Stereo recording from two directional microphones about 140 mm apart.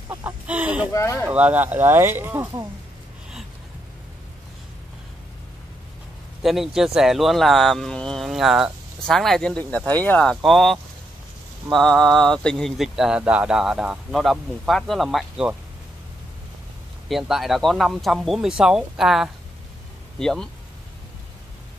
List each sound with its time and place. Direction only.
0.1 s speech: 15° right (ahead or behind)
0.9 s speech: 20° left (ahead or behind)
1.3 s speech: 10° right (ahead or behind)
6.4 s speech: centre (ahead or behind)
10.3 s speech: centre (ahead or behind)
17.1 s speech: centre (ahead or behind)